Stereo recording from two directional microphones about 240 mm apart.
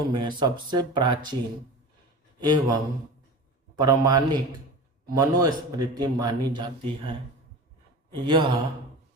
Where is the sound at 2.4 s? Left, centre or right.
Centre.